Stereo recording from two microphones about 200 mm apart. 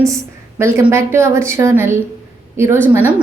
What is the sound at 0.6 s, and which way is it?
A woman's voice, 15° right (ahead or behind).